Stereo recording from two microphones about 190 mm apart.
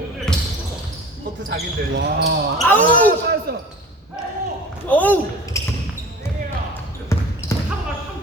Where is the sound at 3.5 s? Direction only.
55° right (ahead or behind).